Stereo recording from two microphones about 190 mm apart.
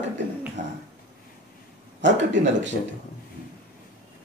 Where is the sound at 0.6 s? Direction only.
40° right (ahead or behind).